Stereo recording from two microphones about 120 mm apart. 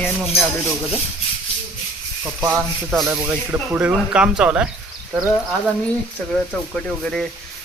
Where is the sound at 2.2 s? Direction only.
15° right (ahead or behind).